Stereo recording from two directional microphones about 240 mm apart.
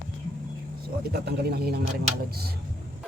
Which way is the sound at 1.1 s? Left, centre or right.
Right.